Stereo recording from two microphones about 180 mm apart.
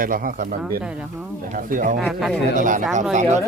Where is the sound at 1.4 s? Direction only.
50° right (ahead or behind).